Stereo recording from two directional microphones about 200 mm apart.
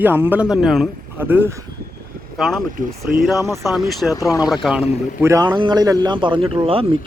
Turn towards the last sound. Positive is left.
turn(degrees=-25)  # may be behind; listen again after turning